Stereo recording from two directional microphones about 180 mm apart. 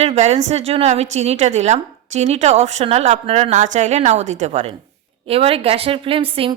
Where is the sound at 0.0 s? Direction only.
35° right (ahead or behind).